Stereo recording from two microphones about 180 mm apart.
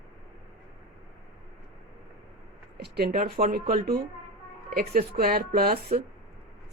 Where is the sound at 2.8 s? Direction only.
60° right (ahead or behind).